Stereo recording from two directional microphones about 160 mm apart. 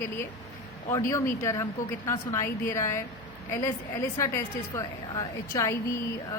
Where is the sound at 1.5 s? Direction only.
15° left (ahead or behind).